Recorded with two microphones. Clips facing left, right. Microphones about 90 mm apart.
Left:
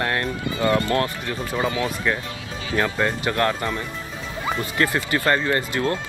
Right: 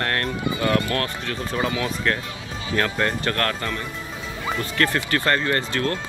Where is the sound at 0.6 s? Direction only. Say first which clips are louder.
Left 3 dB; 25° left (ahead or behind).